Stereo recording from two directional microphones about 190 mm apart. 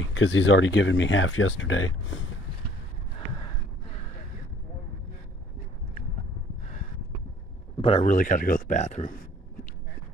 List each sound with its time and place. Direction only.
0.1 s speech: 80° left
7.8 s a man's voice: 35° left (ahead or behind)